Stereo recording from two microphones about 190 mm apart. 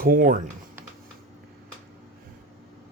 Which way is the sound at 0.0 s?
50° right (ahead or behind).